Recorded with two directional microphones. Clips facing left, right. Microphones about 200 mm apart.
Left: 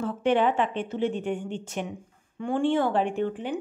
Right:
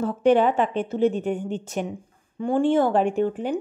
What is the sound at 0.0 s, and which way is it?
Speech, 40° right (ahead or behind).